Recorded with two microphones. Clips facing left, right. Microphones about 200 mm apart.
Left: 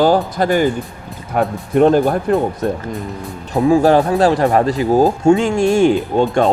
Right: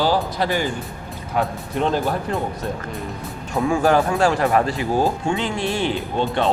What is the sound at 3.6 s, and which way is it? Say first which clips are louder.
Speech: left 6 dB; 35° left (ahead or behind).